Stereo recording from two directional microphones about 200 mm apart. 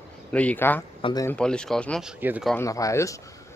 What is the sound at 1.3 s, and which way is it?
Speech, 5° left (ahead or behind).